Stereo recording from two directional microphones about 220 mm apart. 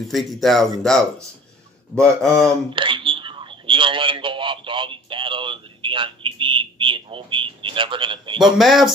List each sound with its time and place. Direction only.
0.0 s speech: centre (ahead or behind)
2.7 s a sound: 20° right (ahead or behind)
8.5 s speech: centre (ahead or behind)